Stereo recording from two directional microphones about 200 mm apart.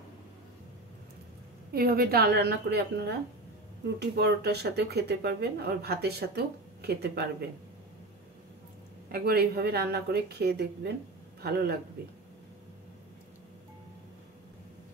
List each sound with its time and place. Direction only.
1.7 s speech: 50° right (ahead or behind)
9.1 s speech: 50° right (ahead or behind)